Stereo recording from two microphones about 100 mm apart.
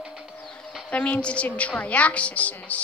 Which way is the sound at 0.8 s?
10° left (ahead or behind).